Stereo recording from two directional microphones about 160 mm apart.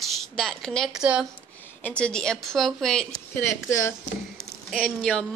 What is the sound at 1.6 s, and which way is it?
Speech, 10° left (ahead or behind).